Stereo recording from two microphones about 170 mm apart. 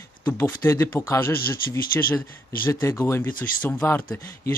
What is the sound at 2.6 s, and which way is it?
Speech, 15° left (ahead or behind).